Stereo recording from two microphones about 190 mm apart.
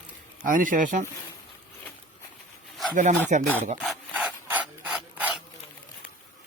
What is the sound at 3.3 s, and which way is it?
Speech, 40° right (ahead or behind).